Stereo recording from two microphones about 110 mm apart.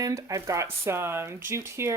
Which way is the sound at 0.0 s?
30° right (ahead or behind).